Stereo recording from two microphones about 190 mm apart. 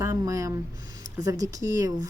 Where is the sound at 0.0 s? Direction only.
15° right (ahead or behind).